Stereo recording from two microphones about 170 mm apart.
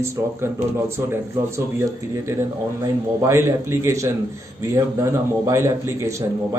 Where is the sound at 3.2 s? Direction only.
15° right (ahead or behind).